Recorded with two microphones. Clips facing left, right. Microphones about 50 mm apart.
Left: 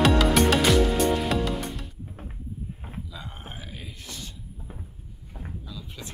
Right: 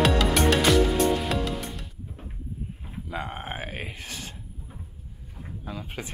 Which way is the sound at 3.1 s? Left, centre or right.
Right.